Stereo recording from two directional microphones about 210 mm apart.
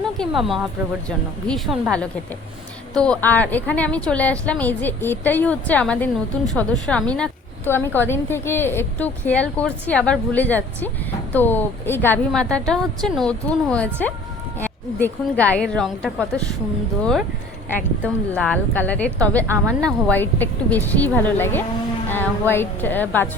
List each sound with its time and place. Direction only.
0.2 s a woman's voice: centre (ahead or behind)